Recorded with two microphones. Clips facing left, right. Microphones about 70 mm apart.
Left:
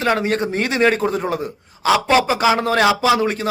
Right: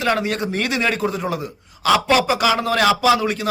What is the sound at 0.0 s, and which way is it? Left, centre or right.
A man's voice, left.